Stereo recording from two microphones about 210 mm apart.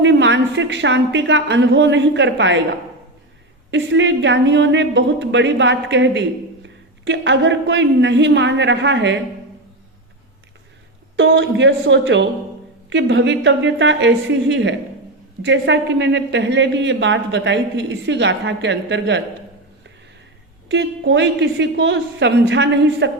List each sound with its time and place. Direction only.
0.0 s a woman's voice: 60° right (ahead or behind)
3.7 s a woman's voice: 60° right (ahead or behind)
11.2 s a woman's voice: 60° right (ahead or behind)
20.7 s a woman's voice: 55° right (ahead or behind)